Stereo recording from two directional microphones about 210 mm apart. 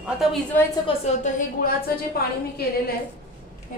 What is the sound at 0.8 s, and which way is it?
Speech, 35° left (ahead or behind).